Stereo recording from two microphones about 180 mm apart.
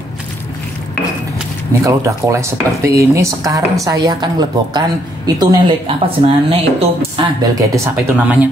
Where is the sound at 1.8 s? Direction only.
15° right (ahead or behind).